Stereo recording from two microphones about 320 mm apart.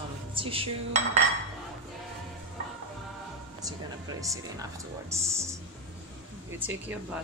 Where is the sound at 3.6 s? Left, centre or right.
Centre.